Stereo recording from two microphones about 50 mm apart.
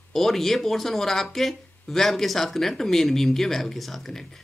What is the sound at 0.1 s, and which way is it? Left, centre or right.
Speech, centre.